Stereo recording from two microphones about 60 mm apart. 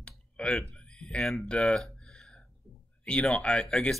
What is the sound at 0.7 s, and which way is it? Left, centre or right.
Speech, centre.